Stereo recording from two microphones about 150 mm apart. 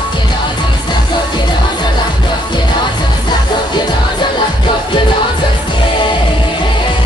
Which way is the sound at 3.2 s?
30° left (ahead or behind).